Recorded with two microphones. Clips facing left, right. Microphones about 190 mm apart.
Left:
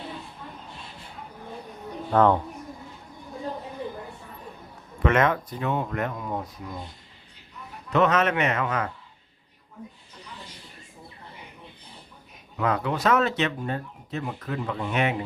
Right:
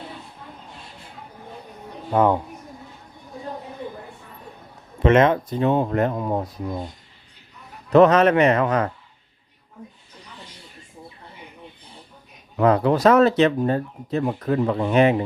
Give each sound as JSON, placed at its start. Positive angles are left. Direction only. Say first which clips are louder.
{"t": 2.0, "sound": "speech", "louder": "right 1 dB", "side_deg": -10}
{"t": 5.0, "sound": "speech", "louder": "right 6 dB", "side_deg": -25}
{"t": 7.9, "sound": "speech", "louder": "right 8 dB", "side_deg": -35}
{"t": 12.5, "sound": "speech", "louder": "right 8 dB", "side_deg": -35}